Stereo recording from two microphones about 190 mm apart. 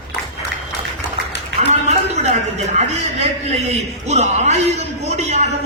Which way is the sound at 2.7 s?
35° right (ahead or behind).